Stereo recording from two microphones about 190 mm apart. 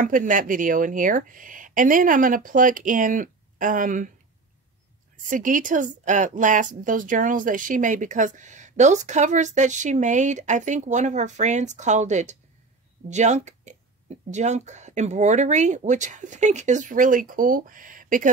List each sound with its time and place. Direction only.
0.0 s speech: 45° right (ahead or behind)
5.3 s a woman's voice: 45° right (ahead or behind)